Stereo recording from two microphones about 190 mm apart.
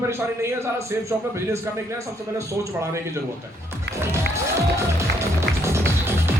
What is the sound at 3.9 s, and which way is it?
Music, 15° right (ahead or behind).